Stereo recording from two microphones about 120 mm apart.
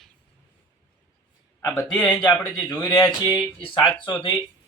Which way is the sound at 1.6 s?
20° left (ahead or behind).